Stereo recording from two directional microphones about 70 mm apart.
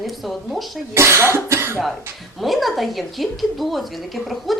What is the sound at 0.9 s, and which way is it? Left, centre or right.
Cough, right.